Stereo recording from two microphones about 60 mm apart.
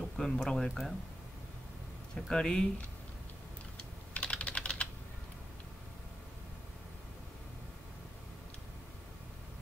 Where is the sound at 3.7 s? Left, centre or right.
Centre.